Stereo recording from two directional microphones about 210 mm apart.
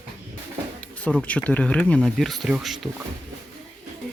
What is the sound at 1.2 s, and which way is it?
Speech, 5° left (ahead or behind).